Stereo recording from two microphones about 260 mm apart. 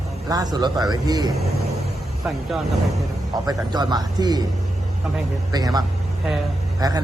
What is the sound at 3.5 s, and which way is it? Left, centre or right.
A man's voice, centre.